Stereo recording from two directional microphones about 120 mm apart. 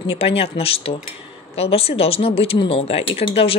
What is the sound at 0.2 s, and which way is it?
Speech, 55° left (ahead or behind).